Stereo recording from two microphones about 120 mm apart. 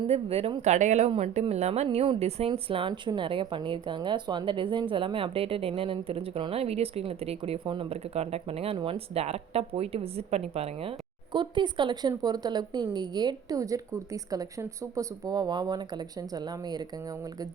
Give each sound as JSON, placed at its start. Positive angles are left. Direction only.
{"t": 0.1, "sound": "a woman's voice", "side_deg": -55}
{"t": 0.6, "sound": "speech", "side_deg": -75}
{"t": 1.1, "sound": "a woman's voice", "side_deg": -65}
{"t": 2.5, "sound": "speech", "side_deg": -45}